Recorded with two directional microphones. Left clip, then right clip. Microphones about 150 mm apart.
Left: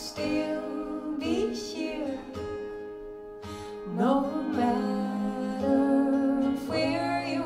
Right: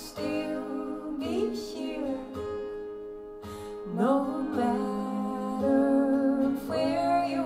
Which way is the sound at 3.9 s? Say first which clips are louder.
Even; 35° right (ahead or behind).